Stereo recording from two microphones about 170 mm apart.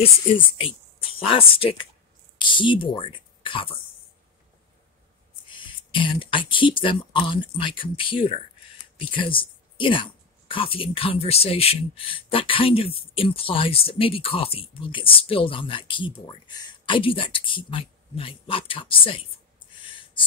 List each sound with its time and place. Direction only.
1.3 s speech: 35° left (ahead or behind)
5.5 s speech: 30° left (ahead or behind)
19.8 s a sound: 30° left (ahead or behind)